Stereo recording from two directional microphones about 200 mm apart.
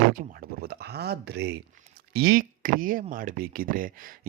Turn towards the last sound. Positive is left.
turn(degrees=-45)  # may be behind; listen again after turning